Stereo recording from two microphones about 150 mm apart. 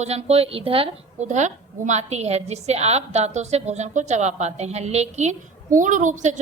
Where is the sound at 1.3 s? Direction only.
50° right (ahead or behind).